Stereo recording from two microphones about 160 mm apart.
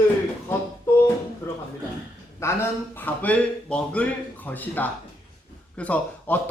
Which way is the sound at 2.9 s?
10° left (ahead or behind).